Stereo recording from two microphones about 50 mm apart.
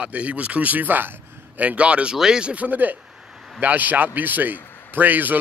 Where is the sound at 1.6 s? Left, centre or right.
Right.